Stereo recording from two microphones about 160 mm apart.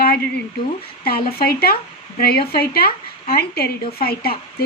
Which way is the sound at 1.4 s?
70° left (ahead or behind).